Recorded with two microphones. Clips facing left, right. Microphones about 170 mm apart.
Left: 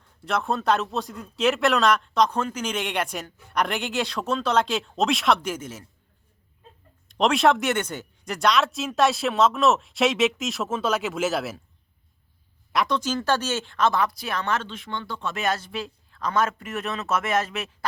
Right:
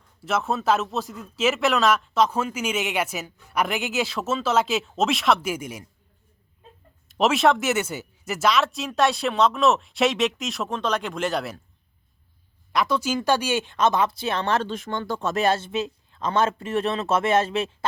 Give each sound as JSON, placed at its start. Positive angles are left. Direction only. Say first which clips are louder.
{"t": 0.2, "sound": "speech", "louder": "right 1 dB", "side_deg": -5}
{"t": 7.1, "sound": "speech", "louder": "even", "side_deg": -5}
{"t": 12.7, "sound": "speech", "louder": "right 1 dB", "side_deg": -5}